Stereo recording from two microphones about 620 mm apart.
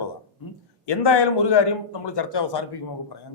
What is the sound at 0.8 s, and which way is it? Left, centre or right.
A man's voice, left.